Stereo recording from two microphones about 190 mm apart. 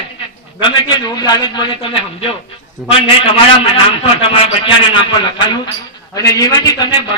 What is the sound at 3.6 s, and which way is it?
A man's voice, 30° left (ahead or behind).